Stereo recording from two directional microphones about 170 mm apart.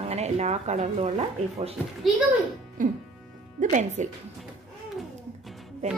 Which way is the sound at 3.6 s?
45° right (ahead or behind).